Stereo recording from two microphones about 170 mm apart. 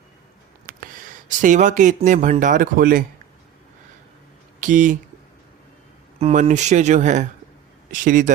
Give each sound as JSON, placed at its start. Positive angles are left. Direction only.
{"t": 1.3, "sound": "speech", "side_deg": -50}
{"t": 4.6, "sound": "speech", "side_deg": -50}
{"t": 6.1, "sound": "speech", "side_deg": -40}